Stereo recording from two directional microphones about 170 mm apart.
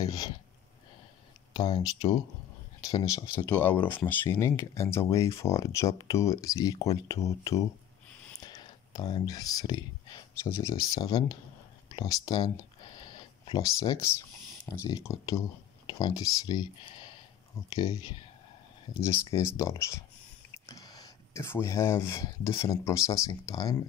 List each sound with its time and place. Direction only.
1.5 s speech: 25° left (ahead or behind)
3.5 s speech: 10° left (ahead or behind); by 12.4 s 25° left (ahead or behind)
13.0 s a sound: 25° left (ahead or behind)
14.7 s speech: 20° left (ahead or behind)
19.2 s speech: 20° left (ahead or behind)